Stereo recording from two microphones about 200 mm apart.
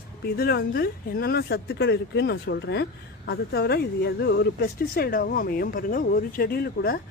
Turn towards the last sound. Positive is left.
turn(degrees=50)  # may be behind; listen again after turning